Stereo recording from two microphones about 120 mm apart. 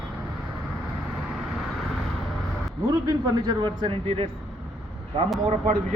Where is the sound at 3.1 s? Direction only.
35° right (ahead or behind).